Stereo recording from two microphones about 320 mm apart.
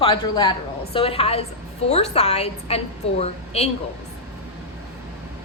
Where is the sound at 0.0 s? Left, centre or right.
Centre.